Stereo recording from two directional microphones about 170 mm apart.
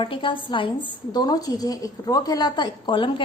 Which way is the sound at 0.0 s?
30° left (ahead or behind).